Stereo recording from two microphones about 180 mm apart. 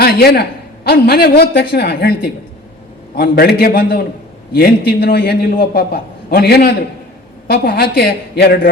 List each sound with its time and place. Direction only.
0.0 s a man's voice: 60° left (ahead or behind)